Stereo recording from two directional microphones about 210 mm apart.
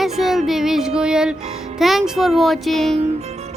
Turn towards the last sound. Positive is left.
turn(degrees=-30)  # may be behind; listen again after turning